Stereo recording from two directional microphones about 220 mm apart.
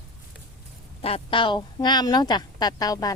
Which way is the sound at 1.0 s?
25° left (ahead or behind).